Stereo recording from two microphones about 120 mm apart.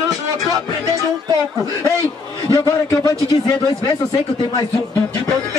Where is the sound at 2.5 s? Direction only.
35° left (ahead or behind).